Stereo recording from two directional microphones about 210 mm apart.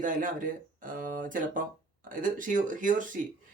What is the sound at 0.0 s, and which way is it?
Speech, 40° right (ahead or behind).